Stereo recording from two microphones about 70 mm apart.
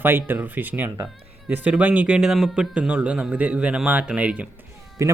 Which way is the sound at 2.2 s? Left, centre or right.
Centre.